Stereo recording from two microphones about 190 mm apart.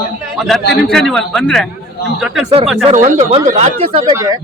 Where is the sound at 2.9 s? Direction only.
40° right (ahead or behind).